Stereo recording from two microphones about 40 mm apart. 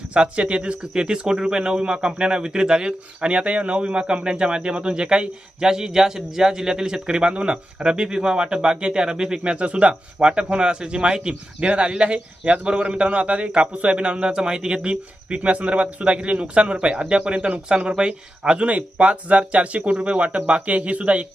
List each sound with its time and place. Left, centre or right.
0.1 s speech: right